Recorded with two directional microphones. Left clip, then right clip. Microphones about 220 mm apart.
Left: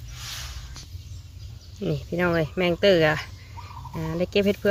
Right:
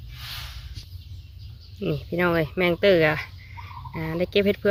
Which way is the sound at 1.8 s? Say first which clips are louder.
Right 1 dB; 5° left (ahead or behind).